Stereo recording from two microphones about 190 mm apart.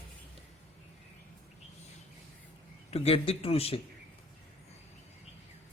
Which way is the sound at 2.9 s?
30° left (ahead or behind).